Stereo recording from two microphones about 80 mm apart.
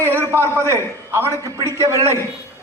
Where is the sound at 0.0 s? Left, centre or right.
Right.